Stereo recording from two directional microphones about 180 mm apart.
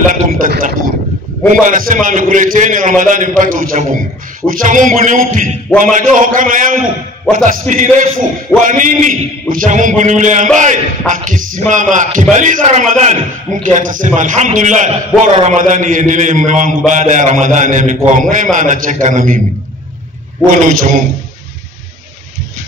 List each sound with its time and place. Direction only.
0.1 s a sound: 50° right (ahead or behind)
1.5 s a man's voice: 45° right (ahead or behind)
20.5 s a man's voice: 45° right (ahead or behind)